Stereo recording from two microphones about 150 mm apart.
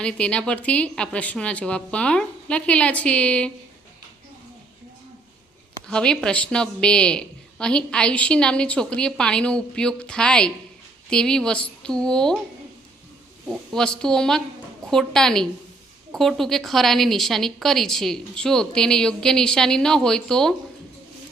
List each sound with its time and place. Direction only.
0.0 s a woman's voice: 5° left (ahead or behind)
5.9 s a woman's voice: 5° left (ahead or behind)
13.7 s speech: 5° left (ahead or behind)